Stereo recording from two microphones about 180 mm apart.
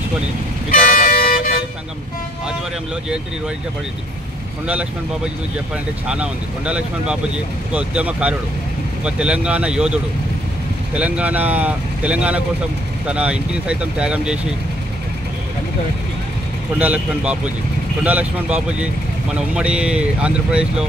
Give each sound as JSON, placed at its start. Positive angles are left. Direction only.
{"t": 0.7, "sound": "toot", "side_deg": 50}
{"t": 6.0, "sound": "speech", "side_deg": -5}
{"t": 11.0, "sound": "speech", "side_deg": -5}
{"t": 16.7, "sound": "speech", "side_deg": -10}